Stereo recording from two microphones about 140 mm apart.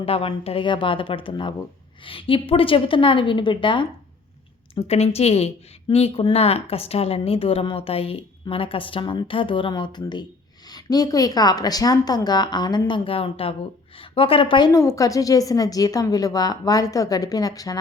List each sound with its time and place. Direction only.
0.0 s speech: 40° left (ahead or behind)
4.7 s a woman's voice: 45° left (ahead or behind)
14.7 s a woman's voice: 20° left (ahead or behind)